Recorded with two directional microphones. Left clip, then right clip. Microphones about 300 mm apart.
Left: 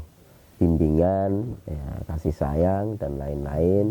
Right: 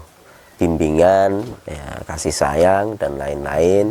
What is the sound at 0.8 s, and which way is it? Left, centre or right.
Speech, centre.